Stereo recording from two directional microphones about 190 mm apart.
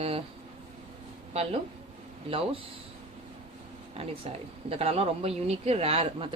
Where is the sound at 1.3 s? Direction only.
30° right (ahead or behind).